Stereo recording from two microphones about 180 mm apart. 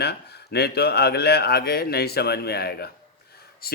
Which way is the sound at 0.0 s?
65° left (ahead or behind).